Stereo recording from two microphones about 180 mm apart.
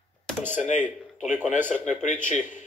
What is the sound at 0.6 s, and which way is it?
Speech, 40° left (ahead or behind).